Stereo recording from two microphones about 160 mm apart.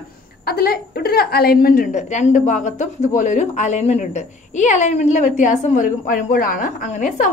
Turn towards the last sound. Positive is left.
turn(degrees=50)  # may be behind; listen again after turning